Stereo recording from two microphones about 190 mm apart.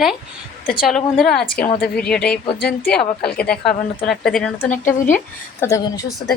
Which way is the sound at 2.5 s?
55° left (ahead or behind).